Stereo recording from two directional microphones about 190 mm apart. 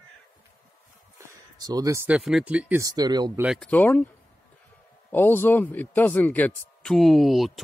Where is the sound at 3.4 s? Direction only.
5° right (ahead or behind).